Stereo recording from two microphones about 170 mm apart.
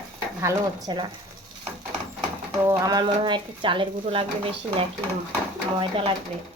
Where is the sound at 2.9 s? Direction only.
25° right (ahead or behind).